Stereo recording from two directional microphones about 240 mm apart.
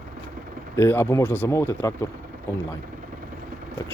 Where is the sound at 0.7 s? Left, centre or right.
Centre.